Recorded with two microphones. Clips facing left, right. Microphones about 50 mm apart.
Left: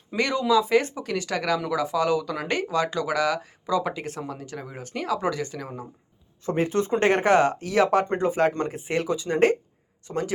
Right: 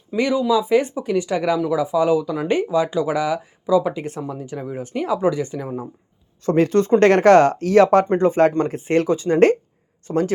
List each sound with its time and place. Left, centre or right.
0.2 s speech: centre
3.9 s speech: right
6.4 s speech: right